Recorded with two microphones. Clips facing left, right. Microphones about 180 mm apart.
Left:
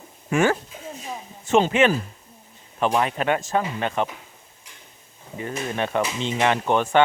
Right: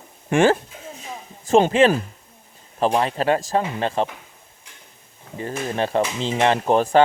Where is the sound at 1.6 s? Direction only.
35° right (ahead or behind).